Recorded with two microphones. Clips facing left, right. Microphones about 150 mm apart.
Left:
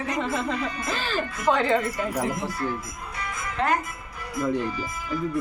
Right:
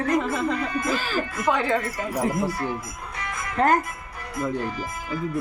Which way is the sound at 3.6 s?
45° right (ahead or behind).